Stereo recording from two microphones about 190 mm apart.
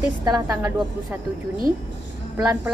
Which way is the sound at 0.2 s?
20° right (ahead or behind).